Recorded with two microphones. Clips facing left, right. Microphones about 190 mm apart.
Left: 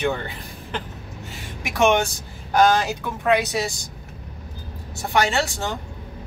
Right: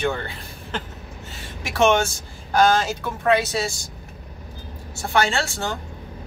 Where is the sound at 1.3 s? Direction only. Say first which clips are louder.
Right 1 dB; 15° left (ahead or behind).